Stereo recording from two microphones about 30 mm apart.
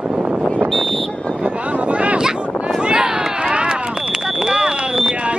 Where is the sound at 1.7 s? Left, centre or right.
Right.